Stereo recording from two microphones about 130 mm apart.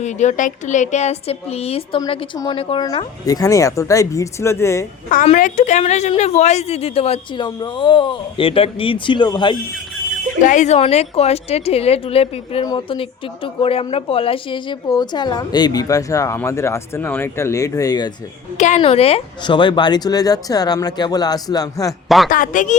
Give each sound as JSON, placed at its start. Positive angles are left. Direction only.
{"t": 0.0, "sound": "a woman's voice", "side_deg": 65}
{"t": 3.2, "sound": "speech", "side_deg": 25}
{"t": 5.1, "sound": "a woman's voice", "side_deg": 70}
{"t": 7.4, "sound": "speech", "side_deg": 35}
{"t": 9.7, "sound": "alarm clock", "side_deg": 0}
{"t": 10.4, "sound": "a woman's voice", "side_deg": 70}
{"t": 18.5, "sound": "a woman's voice", "side_deg": 65}
{"t": 18.8, "sound": "a woman's voice", "side_deg": 50}
{"t": 19.4, "sound": "speech", "side_deg": 35}
{"t": 22.3, "sound": "speech", "side_deg": 90}